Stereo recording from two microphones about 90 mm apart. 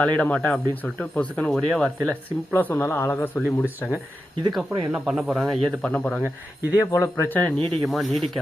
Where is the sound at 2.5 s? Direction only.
20° left (ahead or behind).